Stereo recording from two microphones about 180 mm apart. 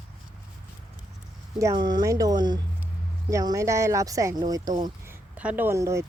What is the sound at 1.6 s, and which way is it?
Speech, 25° right (ahead or behind).